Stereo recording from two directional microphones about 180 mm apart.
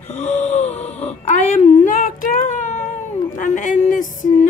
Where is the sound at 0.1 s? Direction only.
40° left (ahead or behind).